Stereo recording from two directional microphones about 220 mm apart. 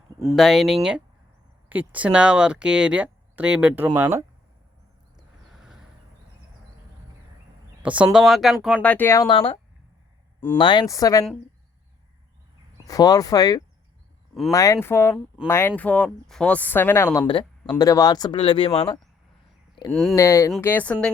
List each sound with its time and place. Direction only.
0.3 s speech: centre (ahead or behind)
5.4 s vehicle: centre (ahead or behind)
7.8 s speech: 5° right (ahead or behind); by 9.6 s 25° left (ahead or behind)
10.6 s speech: 20° left (ahead or behind)
12.9 s speech: 15° left (ahead or behind)
17.2 s speech: 20° left (ahead or behind)
19.9 s speech: centre (ahead or behind)
20.1 s speech: 15° left (ahead or behind)